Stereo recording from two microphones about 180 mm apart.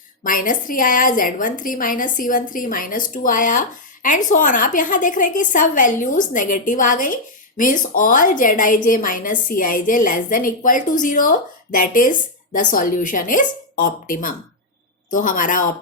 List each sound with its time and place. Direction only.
0.2 s a woman's voice: 50° left (ahead or behind)